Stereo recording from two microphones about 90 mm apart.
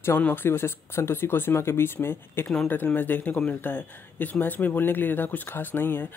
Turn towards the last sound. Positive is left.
turn(degrees=25)  # may be behind; listen again after turning